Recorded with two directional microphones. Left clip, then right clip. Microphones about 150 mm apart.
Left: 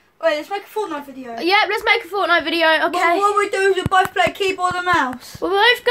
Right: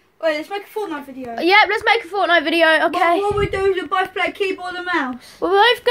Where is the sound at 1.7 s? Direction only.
5° right (ahead or behind).